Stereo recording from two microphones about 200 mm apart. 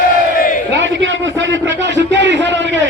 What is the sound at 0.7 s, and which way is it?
A man's voice, 65° right (ahead or behind).